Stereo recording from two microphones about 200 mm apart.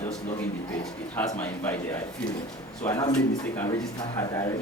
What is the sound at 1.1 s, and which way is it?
Speech, 10° left (ahead or behind).